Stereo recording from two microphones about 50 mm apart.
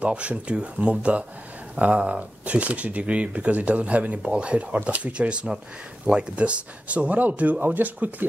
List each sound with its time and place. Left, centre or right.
0.0 s speech: right